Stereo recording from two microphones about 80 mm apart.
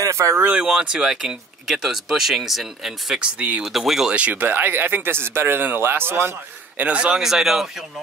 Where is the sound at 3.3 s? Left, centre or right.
Centre.